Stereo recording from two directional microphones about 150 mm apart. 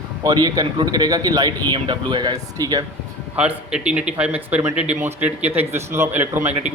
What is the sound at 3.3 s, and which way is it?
A man's voice, 5° right (ahead or behind).